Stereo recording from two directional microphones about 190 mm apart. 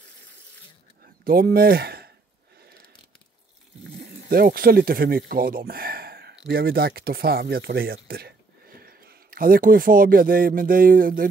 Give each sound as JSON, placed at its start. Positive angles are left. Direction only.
{"t": 1.0, "sound": "speech", "side_deg": -50}
{"t": 4.3, "sound": "speech", "side_deg": -50}